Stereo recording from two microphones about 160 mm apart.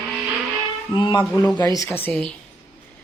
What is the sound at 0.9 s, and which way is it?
Speech, 30° left (ahead or behind).